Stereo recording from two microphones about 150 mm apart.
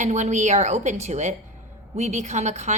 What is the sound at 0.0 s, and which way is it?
A woman's voice, 50° right (ahead or behind).